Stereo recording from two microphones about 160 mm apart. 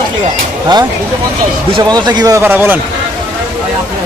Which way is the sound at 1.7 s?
25° right (ahead or behind).